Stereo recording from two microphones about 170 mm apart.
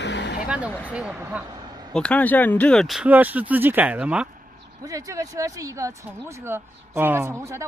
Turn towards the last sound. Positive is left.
turn(degrees=-15)  # may be behind; listen again after turning